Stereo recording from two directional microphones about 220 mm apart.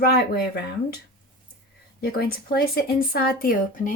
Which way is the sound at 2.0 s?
45° left (ahead or behind).